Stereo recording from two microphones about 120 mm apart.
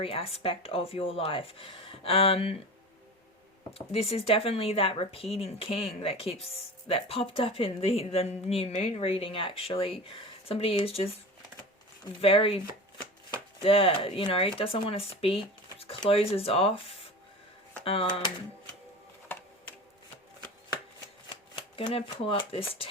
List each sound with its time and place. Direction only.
0.0 s speech: 55° left (ahead or behind)
3.8 s speech: 55° left (ahead or behind)
12.2 s speech: 50° left (ahead or behind)
21.5 s speech: 50° left (ahead or behind)